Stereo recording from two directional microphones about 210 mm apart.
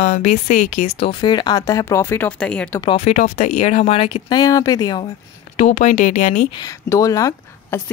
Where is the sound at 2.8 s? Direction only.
25° left (ahead or behind).